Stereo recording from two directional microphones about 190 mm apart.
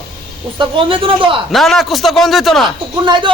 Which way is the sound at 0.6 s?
30° right (ahead or behind).